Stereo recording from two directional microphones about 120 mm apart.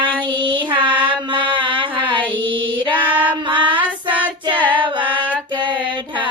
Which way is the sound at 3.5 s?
45° right (ahead or behind).